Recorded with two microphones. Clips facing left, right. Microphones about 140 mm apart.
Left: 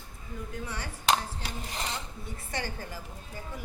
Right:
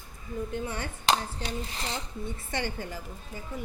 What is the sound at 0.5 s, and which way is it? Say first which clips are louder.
Speech: right 3 dB; 25° right (ahead or behind).